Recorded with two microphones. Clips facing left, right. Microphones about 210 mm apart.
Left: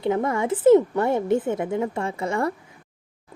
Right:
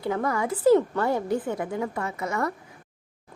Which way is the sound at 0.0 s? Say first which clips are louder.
Left 4 dB; 25° left (ahead or behind).